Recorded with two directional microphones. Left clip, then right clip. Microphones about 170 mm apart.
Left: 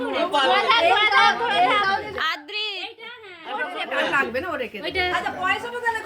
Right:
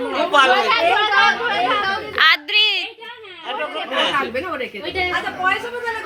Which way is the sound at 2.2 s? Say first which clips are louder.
Right 12 dB; 5° right (ahead or behind).